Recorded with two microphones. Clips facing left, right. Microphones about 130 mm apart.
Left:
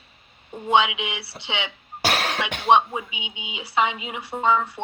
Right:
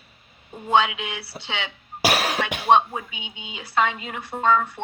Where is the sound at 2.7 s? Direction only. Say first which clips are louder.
Even; 15° left (ahead or behind).